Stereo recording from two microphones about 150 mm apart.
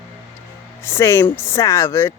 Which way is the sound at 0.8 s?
15° left (ahead or behind).